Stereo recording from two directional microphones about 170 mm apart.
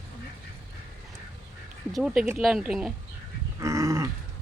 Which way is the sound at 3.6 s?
20° right (ahead or behind).